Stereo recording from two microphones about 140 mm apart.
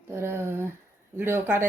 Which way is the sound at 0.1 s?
15° right (ahead or behind).